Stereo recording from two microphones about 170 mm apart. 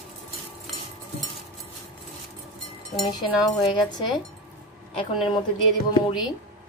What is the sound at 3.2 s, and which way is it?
Speech, 25° left (ahead or behind).